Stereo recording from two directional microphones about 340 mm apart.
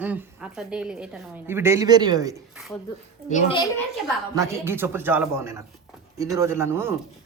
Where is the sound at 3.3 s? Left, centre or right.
Centre.